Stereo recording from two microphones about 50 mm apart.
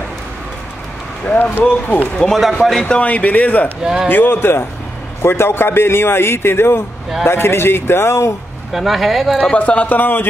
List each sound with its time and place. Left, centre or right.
1.3 s speech: left
2.2 s a man's voice: centre
2.9 s speech: left
3.8 s a man's voice: centre
4.1 s a man's voice: left
8.7 s speech: centre
9.5 s speech: left